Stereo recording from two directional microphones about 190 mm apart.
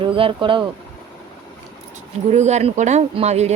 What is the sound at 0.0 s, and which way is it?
Speech, 30° right (ahead or behind).